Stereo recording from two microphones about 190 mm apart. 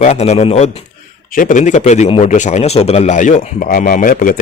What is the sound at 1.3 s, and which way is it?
A man's voice, 45° left (ahead or behind).